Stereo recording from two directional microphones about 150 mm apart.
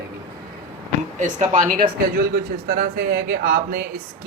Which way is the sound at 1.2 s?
55° right (ahead or behind).